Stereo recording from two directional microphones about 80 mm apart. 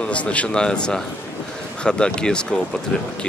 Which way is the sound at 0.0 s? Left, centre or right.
Centre.